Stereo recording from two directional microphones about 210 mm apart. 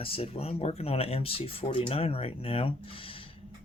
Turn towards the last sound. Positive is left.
turn(degrees=25)  # may be behind; listen again after turning